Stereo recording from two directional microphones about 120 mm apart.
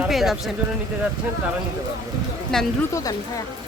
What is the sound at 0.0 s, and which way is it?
Speech, centre (ahead or behind).